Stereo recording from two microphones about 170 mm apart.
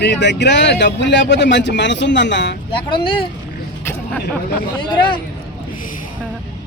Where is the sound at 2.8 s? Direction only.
30° left (ahead or behind).